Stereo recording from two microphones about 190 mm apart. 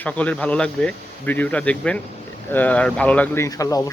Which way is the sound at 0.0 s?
10° left (ahead or behind).